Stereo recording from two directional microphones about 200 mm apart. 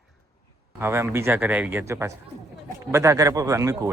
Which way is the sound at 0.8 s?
10° right (ahead or behind).